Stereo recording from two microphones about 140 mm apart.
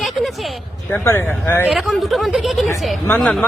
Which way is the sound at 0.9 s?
20° left (ahead or behind).